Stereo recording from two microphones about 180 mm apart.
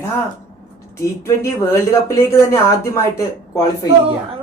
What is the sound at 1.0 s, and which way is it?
Speech, 15° left (ahead or behind).